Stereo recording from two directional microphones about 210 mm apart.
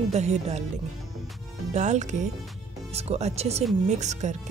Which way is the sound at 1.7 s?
35° right (ahead or behind).